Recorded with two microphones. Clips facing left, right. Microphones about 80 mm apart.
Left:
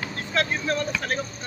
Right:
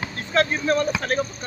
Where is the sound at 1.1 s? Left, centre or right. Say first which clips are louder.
Right 6 dB; centre.